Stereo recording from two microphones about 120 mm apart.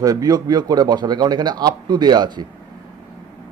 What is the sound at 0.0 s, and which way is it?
A man's voice, 30° right (ahead or behind).